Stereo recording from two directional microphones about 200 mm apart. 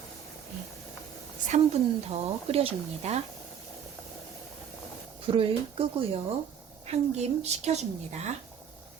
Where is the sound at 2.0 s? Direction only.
30° right (ahead or behind).